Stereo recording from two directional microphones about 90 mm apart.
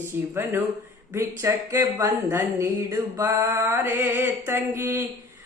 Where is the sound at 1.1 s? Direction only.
30° right (ahead or behind).